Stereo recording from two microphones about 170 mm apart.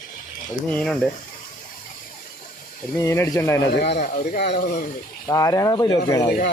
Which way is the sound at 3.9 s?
50° left (ahead or behind).